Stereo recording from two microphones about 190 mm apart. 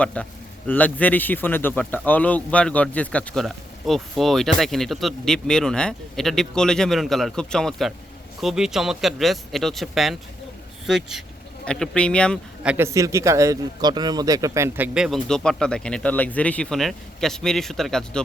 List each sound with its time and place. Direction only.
0.0 s a man's voice: 5° left (ahead or behind)
12.6 s speech: 10° right (ahead or behind)
14.9 s speech: centre (ahead or behind)